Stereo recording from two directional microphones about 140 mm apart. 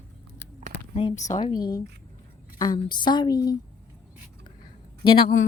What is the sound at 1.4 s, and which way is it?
Speech, 30° left (ahead or behind).